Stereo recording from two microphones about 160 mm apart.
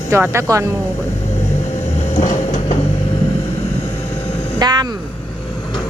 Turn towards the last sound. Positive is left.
turn(degrees=-25)  # may be behind; listen again after turning